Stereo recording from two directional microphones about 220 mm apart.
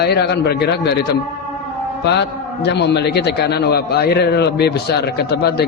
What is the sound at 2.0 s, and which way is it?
A man's voice, 50° left (ahead or behind).